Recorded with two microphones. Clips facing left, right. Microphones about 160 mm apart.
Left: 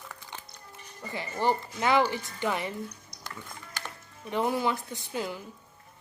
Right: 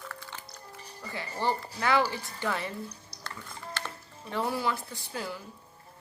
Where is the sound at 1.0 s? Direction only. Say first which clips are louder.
Left 3 dB; 20° left (ahead or behind).